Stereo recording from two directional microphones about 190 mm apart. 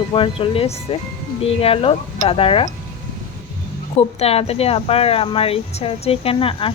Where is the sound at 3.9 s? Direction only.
30° left (ahead or behind).